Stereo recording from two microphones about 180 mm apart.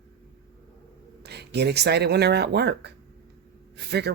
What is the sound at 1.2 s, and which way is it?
Speech, 65° right (ahead or behind).